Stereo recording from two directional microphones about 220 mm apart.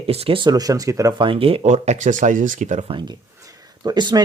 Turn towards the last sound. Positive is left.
turn(degrees=-20)  # may be behind; listen again after turning